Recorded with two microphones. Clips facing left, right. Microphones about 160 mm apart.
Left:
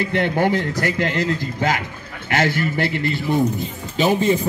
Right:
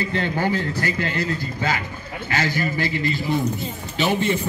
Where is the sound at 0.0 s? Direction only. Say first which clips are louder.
Left 4 dB; 70° left (ahead or behind); by 1.7 s 90° left.